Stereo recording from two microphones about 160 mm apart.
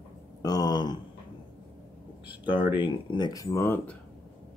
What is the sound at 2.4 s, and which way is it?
Speech, 30° left (ahead or behind).